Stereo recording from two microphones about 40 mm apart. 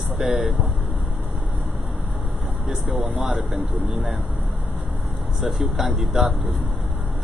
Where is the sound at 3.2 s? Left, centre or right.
Right.